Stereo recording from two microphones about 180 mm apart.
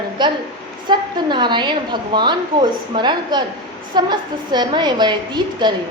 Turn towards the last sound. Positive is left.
turn(degrees=-25)  # may be behind; listen again after turning